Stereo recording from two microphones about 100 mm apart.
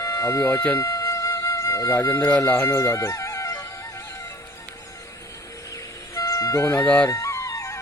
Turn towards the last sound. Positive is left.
turn(degrees=30)  # may be behind; listen again after turning